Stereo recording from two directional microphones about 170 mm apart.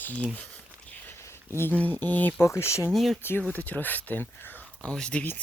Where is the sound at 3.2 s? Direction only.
10° left (ahead or behind).